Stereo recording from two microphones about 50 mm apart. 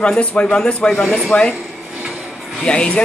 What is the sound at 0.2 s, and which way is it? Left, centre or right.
Speech, left.